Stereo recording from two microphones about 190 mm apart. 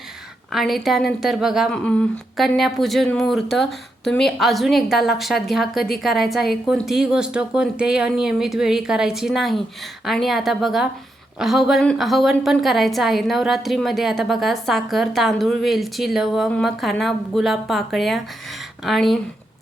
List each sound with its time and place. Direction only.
0.5 s a woman's voice: centre (ahead or behind)